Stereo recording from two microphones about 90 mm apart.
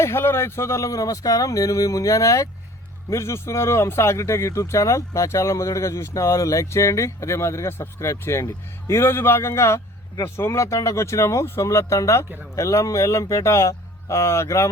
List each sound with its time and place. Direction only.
0.0 s a man's voice: 30° left (ahead or behind)